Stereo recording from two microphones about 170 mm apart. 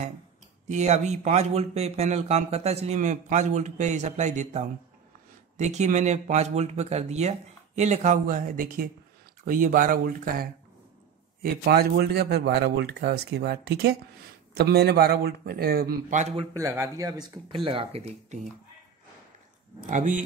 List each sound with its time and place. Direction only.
0.7 s speech: 45° right (ahead or behind); by 16.2 s 60° right (ahead or behind)
16.2 s speech: 40° right (ahead or behind)
16.5 s speech: 20° right (ahead or behind)
17.6 s speech: 35° right (ahead or behind)
19.9 s speech: 50° right (ahead or behind)